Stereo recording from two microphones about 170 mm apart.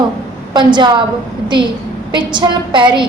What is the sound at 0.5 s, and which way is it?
Speech, 25° right (ahead or behind).